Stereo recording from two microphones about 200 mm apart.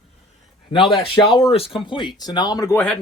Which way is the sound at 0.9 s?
25° left (ahead or behind).